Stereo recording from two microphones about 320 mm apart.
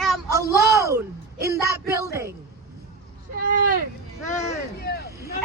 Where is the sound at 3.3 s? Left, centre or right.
Right.